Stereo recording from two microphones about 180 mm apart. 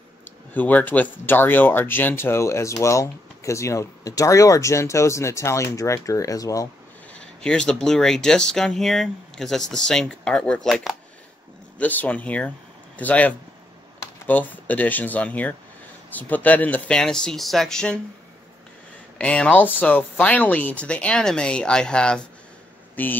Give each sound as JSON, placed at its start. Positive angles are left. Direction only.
{"t": 0.6, "sound": "speech", "side_deg": 10}
{"t": 7.4, "sound": "speech", "side_deg": 5}
{"t": 19.1, "sound": "speech", "side_deg": 5}